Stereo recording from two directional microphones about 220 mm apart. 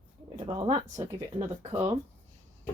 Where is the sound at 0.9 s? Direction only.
15° right (ahead or behind).